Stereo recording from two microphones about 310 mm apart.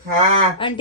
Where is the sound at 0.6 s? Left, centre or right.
Centre.